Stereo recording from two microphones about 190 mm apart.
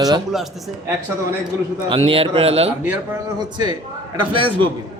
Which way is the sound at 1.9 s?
30° right (ahead or behind).